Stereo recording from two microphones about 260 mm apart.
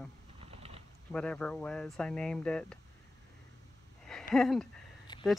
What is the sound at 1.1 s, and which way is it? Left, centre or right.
Speech, centre.